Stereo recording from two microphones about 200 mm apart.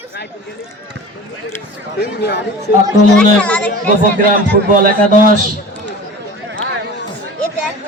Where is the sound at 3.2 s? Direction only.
5° left (ahead or behind).